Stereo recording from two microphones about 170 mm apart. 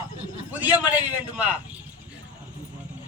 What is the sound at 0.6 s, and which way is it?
Speech, 10° right (ahead or behind).